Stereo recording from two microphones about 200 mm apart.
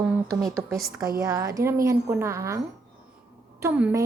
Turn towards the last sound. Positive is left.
turn(degrees=-10)  # may be behind; listen again after turning